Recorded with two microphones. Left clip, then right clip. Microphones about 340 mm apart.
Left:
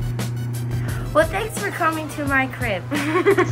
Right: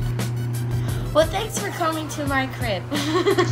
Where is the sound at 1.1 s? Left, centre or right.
Centre.